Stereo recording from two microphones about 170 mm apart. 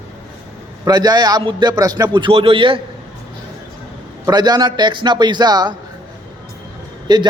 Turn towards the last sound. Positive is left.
turn(degrees=-25)  # may be behind; listen again after turning